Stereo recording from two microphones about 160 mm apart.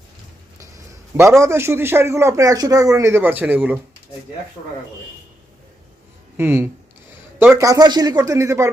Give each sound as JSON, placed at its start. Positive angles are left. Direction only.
{"t": 0.6, "sound": "a man's voice", "side_deg": -15}
{"t": 6.3, "sound": "a man's voice", "side_deg": -15}